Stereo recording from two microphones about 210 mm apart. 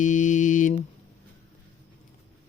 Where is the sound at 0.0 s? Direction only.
35° left (ahead or behind).